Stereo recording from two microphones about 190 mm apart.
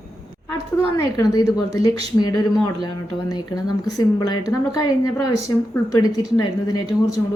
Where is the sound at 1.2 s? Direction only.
20° left (ahead or behind).